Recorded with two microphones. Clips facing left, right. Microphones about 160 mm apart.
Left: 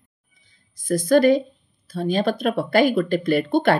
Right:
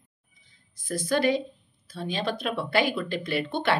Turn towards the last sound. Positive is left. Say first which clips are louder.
# left 9 dB
turn(degrees=45)  # may be behind; listen again after turning